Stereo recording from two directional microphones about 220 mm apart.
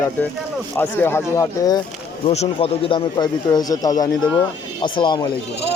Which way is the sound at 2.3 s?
25° left (ahead or behind).